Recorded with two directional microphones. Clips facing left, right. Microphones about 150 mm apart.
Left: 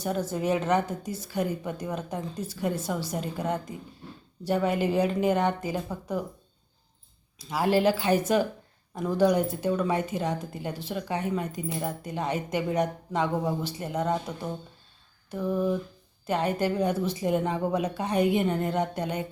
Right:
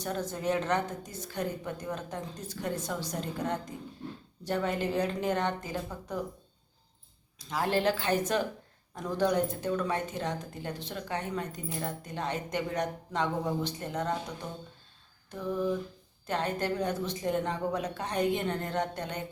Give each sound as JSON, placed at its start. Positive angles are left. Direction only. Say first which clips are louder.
{"t": 0.0, "sound": "speech", "louder": "left 4 dB", "side_deg": 10}
{"t": 7.3, "sound": "speech", "louder": "left 5 dB", "side_deg": 10}